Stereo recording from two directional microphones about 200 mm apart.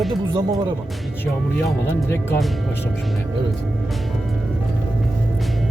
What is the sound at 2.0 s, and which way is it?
Speech, 15° left (ahead or behind).